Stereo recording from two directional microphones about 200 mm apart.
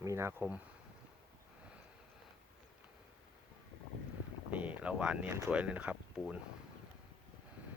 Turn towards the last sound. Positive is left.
turn(degrees=-5)  # may be behind; listen again after turning